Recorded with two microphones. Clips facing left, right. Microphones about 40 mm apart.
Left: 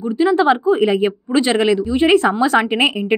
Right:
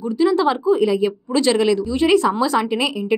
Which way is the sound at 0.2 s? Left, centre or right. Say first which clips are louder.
Left 3 dB; left.